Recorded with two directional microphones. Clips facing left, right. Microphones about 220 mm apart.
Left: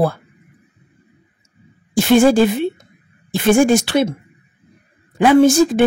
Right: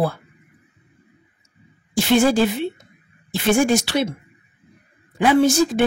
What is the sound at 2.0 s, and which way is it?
A woman's voice, 50° left (ahead or behind).